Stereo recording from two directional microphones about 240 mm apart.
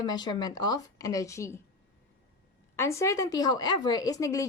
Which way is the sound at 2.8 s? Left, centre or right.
Centre.